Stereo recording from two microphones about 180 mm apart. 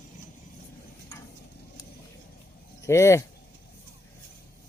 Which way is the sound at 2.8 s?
15° left (ahead or behind).